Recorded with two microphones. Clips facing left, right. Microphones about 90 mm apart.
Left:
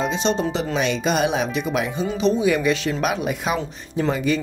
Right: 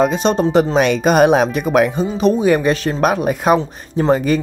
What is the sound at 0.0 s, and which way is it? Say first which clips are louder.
Speech: right 7 dB; 50° right (ahead or behind).